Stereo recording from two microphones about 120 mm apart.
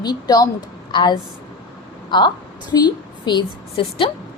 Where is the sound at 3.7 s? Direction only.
50° left (ahead or behind).